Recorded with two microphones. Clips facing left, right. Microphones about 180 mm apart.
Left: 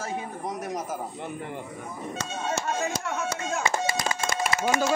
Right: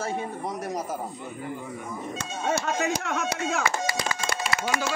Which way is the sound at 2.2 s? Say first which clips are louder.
Right 3 dB; 70° right (ahead or behind).